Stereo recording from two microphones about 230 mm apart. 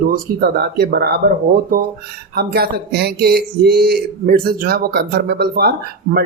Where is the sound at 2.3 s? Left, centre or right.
Right.